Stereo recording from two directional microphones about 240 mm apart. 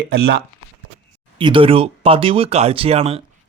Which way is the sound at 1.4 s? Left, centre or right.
Right.